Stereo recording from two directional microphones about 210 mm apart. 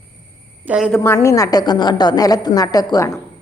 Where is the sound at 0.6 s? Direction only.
5° right (ahead or behind).